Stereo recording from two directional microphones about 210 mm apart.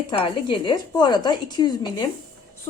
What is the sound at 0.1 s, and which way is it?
Speech, 25° left (ahead or behind).